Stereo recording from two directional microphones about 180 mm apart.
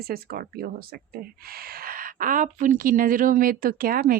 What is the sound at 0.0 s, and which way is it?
Speech, 55° right (ahead or behind).